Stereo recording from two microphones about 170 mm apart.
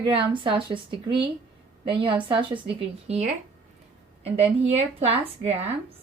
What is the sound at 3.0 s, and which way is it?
Speech, 40° right (ahead or behind).